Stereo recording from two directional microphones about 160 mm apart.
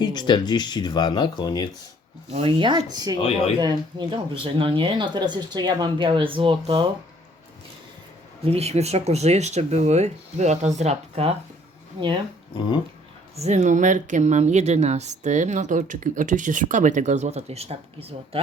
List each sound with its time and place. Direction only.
0.0 s speech: 25° left (ahead or behind)
2.3 s speech: 35° right (ahead or behind)
3.2 s speech: 35° left (ahead or behind)
3.6 s speech: 25° right (ahead or behind)
8.4 s speech: 40° right (ahead or behind)
13.3 s speech: 45° right (ahead or behind)